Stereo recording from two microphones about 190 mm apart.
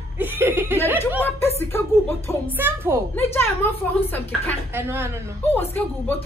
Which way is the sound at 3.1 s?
10° left (ahead or behind).